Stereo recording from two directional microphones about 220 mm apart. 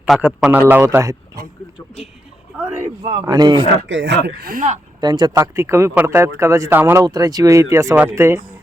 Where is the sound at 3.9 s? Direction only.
55° right (ahead or behind).